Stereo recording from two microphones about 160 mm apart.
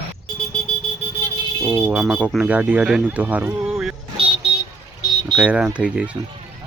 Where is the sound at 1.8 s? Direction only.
5° right (ahead or behind).